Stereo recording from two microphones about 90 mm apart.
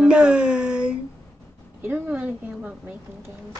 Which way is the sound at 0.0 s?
10° right (ahead or behind).